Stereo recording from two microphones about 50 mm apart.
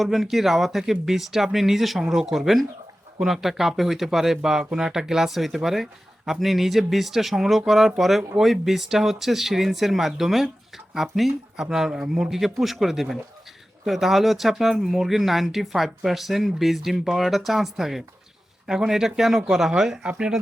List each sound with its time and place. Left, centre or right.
0.0 s speech: centre